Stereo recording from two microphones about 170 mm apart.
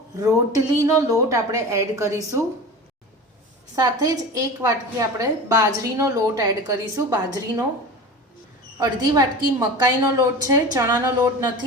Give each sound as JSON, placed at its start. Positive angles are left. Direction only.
{"t": 0.2, "sound": "a woman's voice", "side_deg": -20}
{"t": 3.8, "sound": "a woman's voice", "side_deg": -20}
{"t": 8.8, "sound": "a woman's voice", "side_deg": -20}